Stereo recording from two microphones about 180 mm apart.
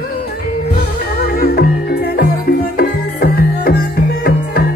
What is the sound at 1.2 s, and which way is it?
Music, 55° left (ahead or behind).